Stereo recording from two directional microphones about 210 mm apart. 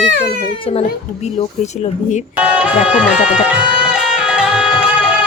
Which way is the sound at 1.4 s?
35° left (ahead or behind).